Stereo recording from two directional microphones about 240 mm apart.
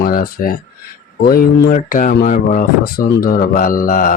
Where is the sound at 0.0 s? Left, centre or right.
Left.